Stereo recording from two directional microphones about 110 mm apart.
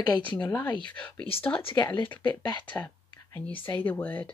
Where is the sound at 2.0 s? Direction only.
15° left (ahead or behind).